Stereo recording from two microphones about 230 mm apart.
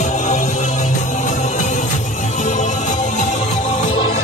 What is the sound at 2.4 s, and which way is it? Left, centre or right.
Music, left.